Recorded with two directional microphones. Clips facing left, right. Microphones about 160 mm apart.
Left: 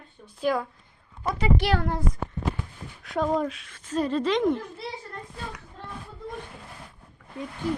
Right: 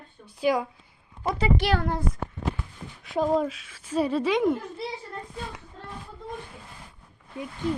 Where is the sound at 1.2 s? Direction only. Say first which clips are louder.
Right 1 dB; 25° right (ahead or behind).